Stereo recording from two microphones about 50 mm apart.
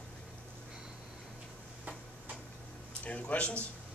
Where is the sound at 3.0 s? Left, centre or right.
Left.